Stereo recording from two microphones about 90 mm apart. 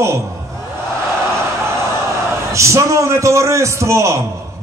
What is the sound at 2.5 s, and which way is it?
A man's voice, 35° right (ahead or behind).